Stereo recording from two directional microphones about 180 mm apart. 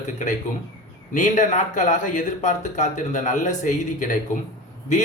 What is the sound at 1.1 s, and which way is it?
A man's voice, 45° left (ahead or behind).